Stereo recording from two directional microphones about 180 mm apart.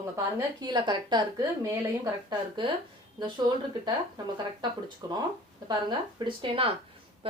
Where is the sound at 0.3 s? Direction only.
25° right (ahead or behind).